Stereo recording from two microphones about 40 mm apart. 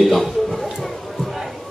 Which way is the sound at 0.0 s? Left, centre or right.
Centre.